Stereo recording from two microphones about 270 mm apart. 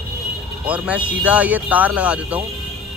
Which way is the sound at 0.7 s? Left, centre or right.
Centre.